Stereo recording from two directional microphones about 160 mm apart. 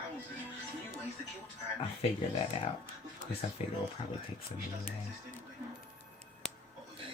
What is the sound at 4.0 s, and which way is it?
Speech, 30° left (ahead or behind).